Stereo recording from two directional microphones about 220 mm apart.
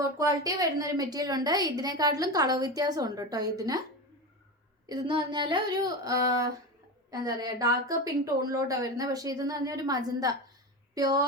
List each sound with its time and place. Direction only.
0.0 s a woman's voice: 15° right (ahead or behind)
4.9 s a woman's voice: 20° right (ahead or behind)